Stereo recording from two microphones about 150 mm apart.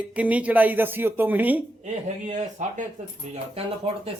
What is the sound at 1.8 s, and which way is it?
Speech, 50° right (ahead or behind).